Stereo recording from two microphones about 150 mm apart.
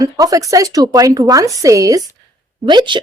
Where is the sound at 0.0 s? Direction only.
25° right (ahead or behind).